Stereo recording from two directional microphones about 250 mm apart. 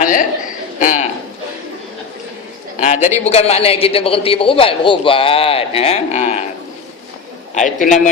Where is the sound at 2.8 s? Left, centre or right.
Left.